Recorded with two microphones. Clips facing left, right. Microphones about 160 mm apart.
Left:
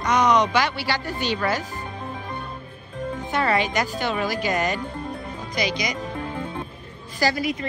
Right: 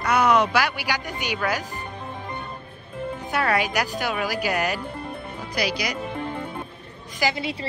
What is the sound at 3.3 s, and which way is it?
A man's voice, 10° right (ahead or behind).